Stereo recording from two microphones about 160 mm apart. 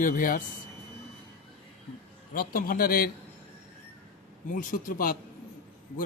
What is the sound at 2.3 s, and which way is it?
Speech, 60° left (ahead or behind).